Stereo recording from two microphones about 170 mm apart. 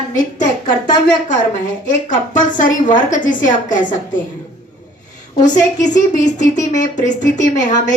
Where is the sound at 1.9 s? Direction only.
50° left (ahead or behind).